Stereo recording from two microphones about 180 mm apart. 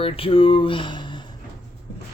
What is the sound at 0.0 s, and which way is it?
Speech, 30° left (ahead or behind).